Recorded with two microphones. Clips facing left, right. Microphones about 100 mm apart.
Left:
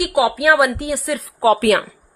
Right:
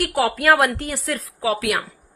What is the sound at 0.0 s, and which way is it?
A woman's voice, 10° left (ahead or behind).